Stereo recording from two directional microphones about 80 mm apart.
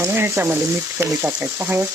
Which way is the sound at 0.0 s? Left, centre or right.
Right.